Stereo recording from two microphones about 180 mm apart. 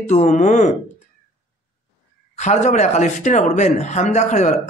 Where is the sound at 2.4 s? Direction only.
40° left (ahead or behind).